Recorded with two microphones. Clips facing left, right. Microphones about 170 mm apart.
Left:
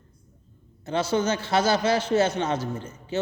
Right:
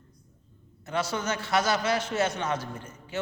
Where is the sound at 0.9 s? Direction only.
30° left (ahead or behind).